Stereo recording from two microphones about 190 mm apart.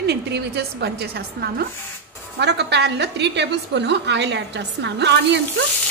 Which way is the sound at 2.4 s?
65° right (ahead or behind).